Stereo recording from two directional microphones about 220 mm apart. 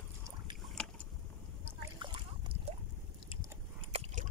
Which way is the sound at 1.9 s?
20° right (ahead or behind).